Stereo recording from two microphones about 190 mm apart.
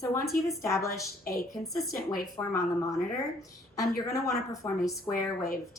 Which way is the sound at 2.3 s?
15° left (ahead or behind).